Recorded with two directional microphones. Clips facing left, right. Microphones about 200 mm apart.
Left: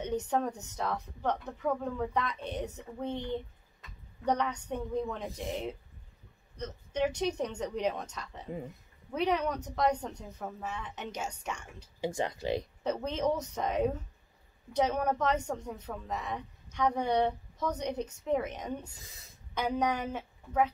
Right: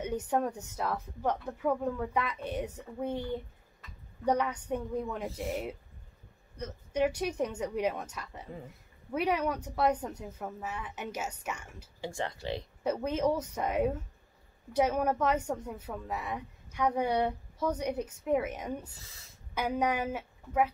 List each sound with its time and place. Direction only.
0.0 s a woman's voice: 10° right (ahead or behind)
12.0 s speech: 20° left (ahead or behind)
12.8 s a woman's voice: 10° right (ahead or behind)
18.9 s speech: 20° left (ahead or behind)
19.5 s a woman's voice: 10° right (ahead or behind)